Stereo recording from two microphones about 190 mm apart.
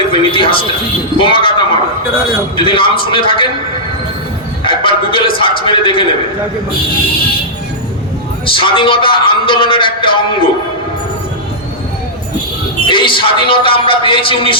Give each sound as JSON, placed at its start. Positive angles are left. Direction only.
{"t": 0.1, "sound": "a man's voice", "side_deg": 25}
{"t": 4.6, "sound": "a man's voice", "side_deg": 25}
{"t": 8.4, "sound": "a man's voice", "side_deg": 25}
{"t": 12.8, "sound": "a man's voice", "side_deg": 25}